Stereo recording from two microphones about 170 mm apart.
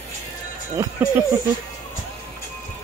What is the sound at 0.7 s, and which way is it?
Music, 20° right (ahead or behind).